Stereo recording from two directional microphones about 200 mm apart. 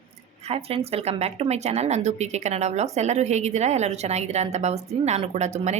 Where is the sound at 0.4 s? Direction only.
30° right (ahead or behind).